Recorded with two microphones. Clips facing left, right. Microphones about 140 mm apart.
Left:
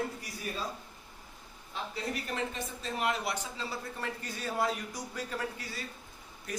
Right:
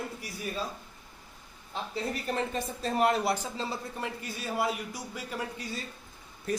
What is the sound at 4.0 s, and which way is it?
A man's voice, 10° right (ahead or behind).